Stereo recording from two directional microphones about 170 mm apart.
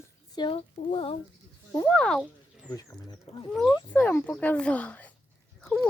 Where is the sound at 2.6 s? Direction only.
20° left (ahead or behind).